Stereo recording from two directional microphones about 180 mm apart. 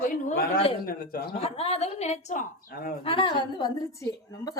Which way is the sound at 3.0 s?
30° left (ahead or behind).